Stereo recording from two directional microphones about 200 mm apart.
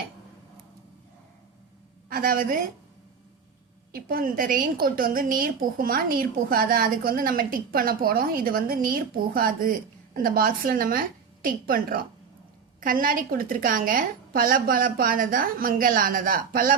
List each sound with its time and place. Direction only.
2.0 s a woman's voice: 45° right (ahead or behind)
3.9 s a woman's voice: 45° right (ahead or behind)